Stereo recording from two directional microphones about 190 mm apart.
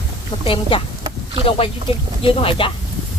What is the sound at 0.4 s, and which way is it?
Speech, 30° left (ahead or behind).